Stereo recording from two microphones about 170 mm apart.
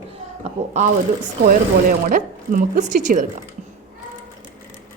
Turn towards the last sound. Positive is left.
turn(degrees=-50)  # may be behind; listen again after turning